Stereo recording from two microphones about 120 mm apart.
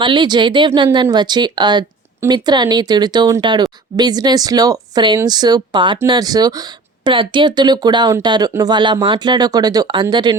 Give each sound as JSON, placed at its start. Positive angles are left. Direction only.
{"t": 0.0, "sound": "speech", "side_deg": -40}